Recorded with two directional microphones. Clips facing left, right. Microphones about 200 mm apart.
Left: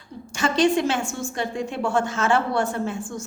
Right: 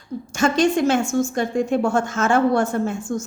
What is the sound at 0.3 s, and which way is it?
A woman's voice, 45° right (ahead or behind).